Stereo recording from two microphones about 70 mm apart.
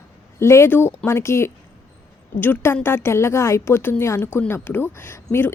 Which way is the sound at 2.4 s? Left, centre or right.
Left.